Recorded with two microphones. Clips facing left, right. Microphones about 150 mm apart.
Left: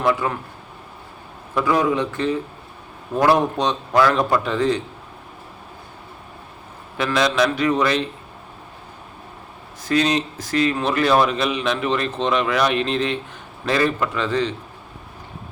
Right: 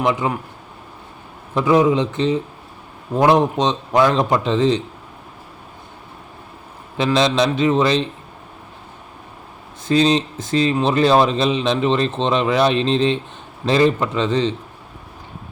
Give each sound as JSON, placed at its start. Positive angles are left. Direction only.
{"t": 0.0, "sound": "speech", "side_deg": -20}
{"t": 1.5, "sound": "speech", "side_deg": -20}
{"t": 6.9, "sound": "speech", "side_deg": -25}
{"t": 9.8, "sound": "speech", "side_deg": -25}